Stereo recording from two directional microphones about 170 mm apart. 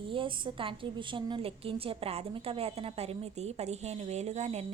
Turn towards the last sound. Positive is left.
turn(degrees=-40)  # may be behind; listen again after turning